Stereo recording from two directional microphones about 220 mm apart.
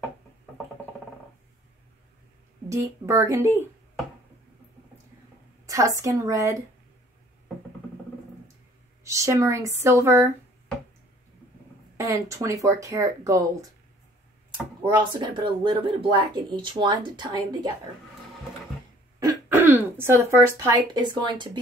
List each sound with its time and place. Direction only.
2.7 s speech: 15° right (ahead or behind)
5.7 s speech: 15° right (ahead or behind)
9.0 s speech: 15° right (ahead or behind)
12.0 s speech: 15° right (ahead or behind)
14.8 s speech: 20° right (ahead or behind)
19.1 s speech: 10° right (ahead or behind)